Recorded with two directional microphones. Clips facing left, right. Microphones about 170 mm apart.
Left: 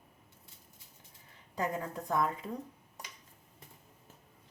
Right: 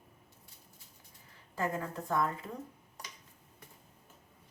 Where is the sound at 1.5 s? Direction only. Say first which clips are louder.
Even; 15° left (ahead or behind).